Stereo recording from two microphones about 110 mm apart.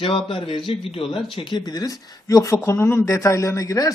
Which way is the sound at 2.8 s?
20° left (ahead or behind).